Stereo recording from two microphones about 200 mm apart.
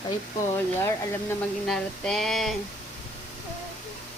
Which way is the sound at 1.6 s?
Centre (ahead or behind).